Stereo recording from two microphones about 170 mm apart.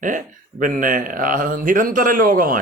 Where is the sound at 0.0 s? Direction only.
50° right (ahead or behind).